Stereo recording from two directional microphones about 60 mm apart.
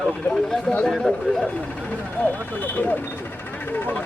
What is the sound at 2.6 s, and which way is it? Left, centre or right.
Speech, left.